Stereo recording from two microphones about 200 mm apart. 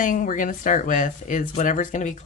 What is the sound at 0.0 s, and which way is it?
Speech, 40° left (ahead or behind).